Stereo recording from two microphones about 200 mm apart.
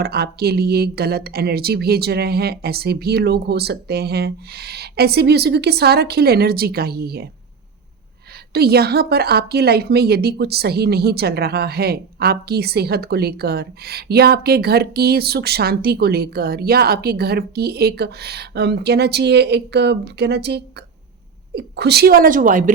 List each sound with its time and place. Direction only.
0.0 s a woman's voice: 50° right (ahead or behind)
8.5 s a woman's voice: 50° right (ahead or behind)